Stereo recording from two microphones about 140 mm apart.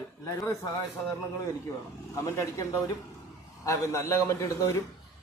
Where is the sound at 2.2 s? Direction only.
20° left (ahead or behind).